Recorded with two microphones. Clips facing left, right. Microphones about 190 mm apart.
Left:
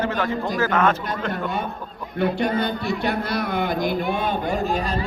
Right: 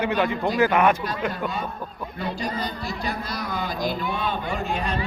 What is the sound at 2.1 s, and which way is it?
A man's voice, 65° left (ahead or behind).